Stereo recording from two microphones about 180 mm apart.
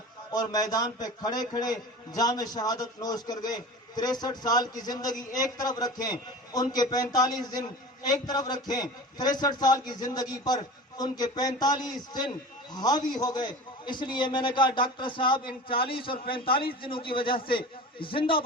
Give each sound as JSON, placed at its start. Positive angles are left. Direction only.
{"t": 0.3, "sound": "a man's voice", "side_deg": 20}